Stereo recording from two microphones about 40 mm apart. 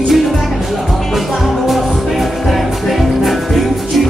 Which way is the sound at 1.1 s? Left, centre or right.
Centre.